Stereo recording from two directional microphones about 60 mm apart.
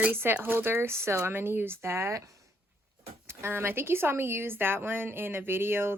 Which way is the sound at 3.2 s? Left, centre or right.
Right.